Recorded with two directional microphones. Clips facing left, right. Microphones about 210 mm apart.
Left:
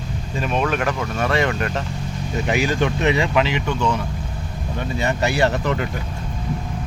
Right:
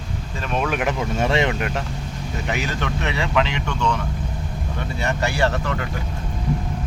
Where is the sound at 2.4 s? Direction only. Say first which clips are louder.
Left 6 dB; 15° left (ahead or behind).